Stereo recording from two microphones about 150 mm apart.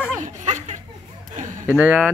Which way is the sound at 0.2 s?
50° right (ahead or behind).